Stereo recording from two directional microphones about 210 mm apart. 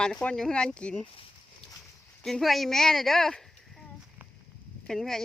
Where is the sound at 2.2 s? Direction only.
Centre (ahead or behind).